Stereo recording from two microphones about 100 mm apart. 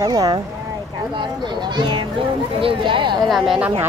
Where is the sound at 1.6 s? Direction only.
50° right (ahead or behind).